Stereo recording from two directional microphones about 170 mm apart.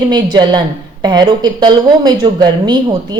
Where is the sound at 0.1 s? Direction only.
25° right (ahead or behind).